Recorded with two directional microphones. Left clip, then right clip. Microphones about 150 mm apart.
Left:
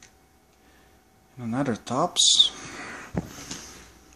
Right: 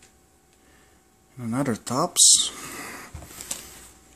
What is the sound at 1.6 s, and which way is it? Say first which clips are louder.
Speech: even; 40° right (ahead or behind).